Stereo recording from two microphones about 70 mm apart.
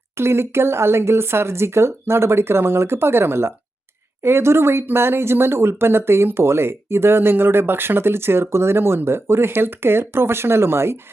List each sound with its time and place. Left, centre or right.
0.2 s speech: right